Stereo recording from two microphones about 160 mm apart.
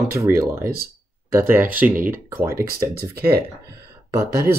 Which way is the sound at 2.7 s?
75° right (ahead or behind).